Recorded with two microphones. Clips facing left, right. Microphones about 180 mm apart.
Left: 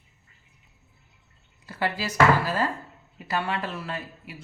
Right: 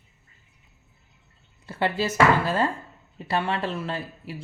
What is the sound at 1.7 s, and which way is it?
Speech, 25° right (ahead or behind).